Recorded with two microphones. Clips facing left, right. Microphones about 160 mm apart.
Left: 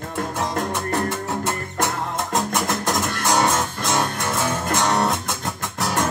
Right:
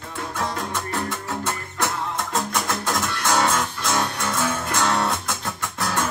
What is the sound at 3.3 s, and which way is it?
Music, 20° left (ahead or behind).